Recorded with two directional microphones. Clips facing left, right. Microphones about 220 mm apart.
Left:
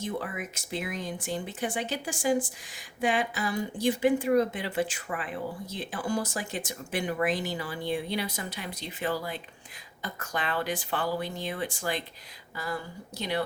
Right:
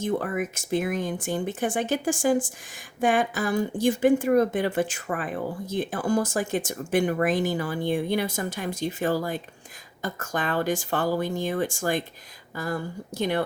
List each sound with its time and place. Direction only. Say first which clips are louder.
0.0 s a woman's voice: right 7 dB; 50° right (ahead or behind)